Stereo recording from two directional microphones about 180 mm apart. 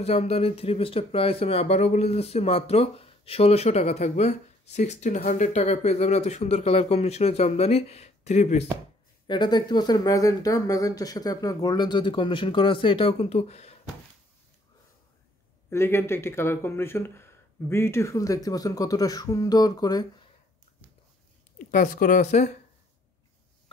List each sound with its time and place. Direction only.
0.0 s speech: 35° left (ahead or behind)
9.3 s speech: 25° left (ahead or behind)
15.7 s speech: 15° left (ahead or behind)
21.6 s speech: 50° left (ahead or behind)